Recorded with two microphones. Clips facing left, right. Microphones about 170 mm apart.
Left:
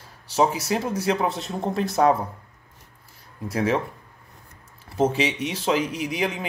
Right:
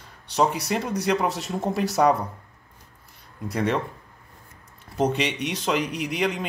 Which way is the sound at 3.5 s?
5° left (ahead or behind).